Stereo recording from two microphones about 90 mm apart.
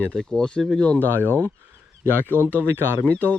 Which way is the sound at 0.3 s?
10° left (ahead or behind).